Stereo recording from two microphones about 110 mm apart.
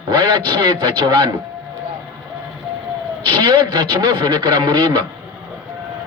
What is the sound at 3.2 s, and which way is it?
A man's voice, 45° right (ahead or behind).